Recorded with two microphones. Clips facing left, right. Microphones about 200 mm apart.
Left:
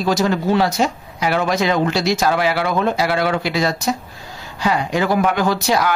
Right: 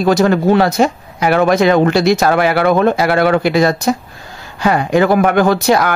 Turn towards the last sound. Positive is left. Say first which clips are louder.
# right 6 dB
turn(degrees=-55)  # may be behind; listen again after turning